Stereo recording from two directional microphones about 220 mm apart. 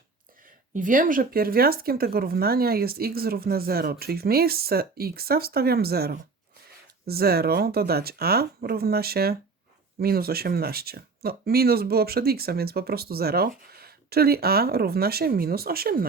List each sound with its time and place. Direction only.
0.7 s speech: 35° right (ahead or behind)